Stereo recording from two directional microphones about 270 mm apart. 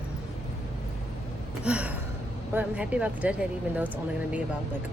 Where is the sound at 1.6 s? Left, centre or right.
Centre.